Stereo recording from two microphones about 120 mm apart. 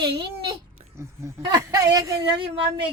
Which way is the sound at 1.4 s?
30° right (ahead or behind).